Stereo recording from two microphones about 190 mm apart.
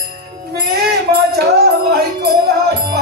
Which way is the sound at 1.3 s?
55° right (ahead or behind).